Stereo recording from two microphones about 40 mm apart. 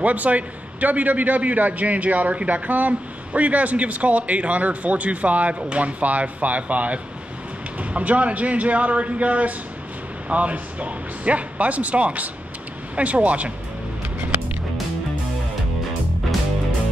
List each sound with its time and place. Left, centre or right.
0.0 s a man's voice: right